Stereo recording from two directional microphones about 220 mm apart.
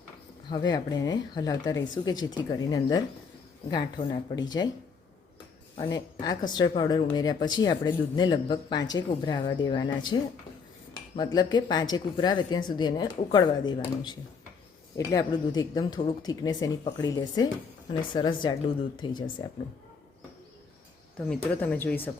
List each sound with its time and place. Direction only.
0.5 s speech: 20° left (ahead or behind)
5.7 s speech: 20° left (ahead or behind)
11.2 s speech: 20° left (ahead or behind)
21.2 s speech: 5° left (ahead or behind)